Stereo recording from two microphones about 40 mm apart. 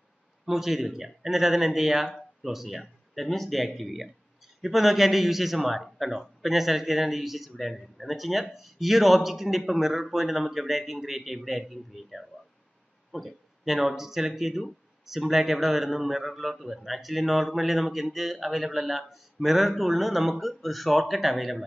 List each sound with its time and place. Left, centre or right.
0.5 s a man's voice: centre